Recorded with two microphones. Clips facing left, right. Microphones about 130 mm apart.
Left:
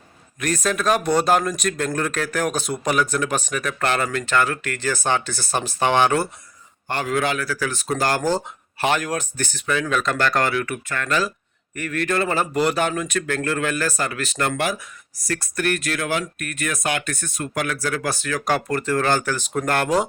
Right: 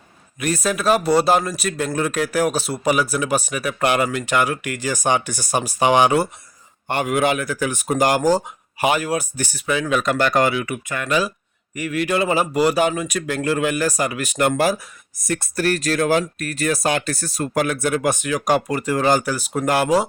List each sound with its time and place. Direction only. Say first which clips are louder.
0.3 s a man's voice: right 1 dB; 10° right (ahead or behind)